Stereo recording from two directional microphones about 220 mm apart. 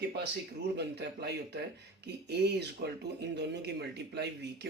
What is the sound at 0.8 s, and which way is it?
Speech, 50° right (ahead or behind).